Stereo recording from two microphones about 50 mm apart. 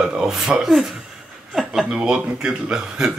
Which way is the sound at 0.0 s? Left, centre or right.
Centre.